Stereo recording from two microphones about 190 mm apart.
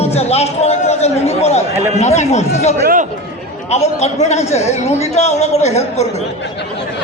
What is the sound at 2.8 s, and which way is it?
Speech, 45° right (ahead or behind).